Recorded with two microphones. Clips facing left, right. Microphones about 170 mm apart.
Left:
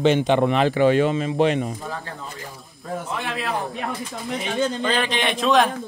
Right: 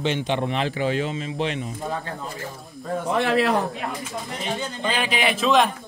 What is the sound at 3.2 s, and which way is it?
Speech, 80° right.